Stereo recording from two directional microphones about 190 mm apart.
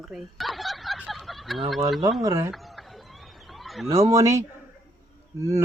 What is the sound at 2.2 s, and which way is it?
Speech, 15° right (ahead or behind).